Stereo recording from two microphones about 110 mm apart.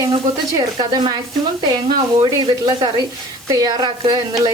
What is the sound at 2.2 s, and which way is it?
Speech, 50° right (ahead or behind).